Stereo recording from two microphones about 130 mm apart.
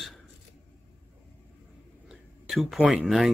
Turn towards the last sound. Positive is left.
turn(degrees=0)  # may be behind; listen again after turning